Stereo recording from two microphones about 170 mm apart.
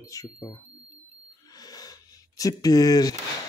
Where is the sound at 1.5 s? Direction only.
20° left (ahead or behind).